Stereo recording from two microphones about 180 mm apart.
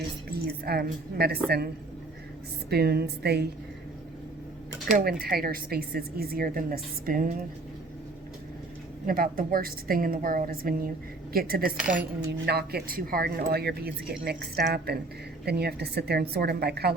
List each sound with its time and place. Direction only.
0.3 s a woman's voice: 60° right (ahead or behind)
4.9 s a woman's voice: 50° right (ahead or behind)
9.0 s a woman's voice: 50° right (ahead or behind)